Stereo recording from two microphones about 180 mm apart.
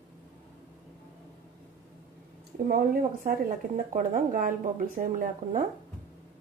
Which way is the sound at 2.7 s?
55° right (ahead or behind).